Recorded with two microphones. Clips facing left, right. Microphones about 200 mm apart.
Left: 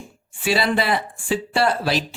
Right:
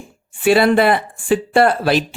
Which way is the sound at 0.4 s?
55° right (ahead or behind).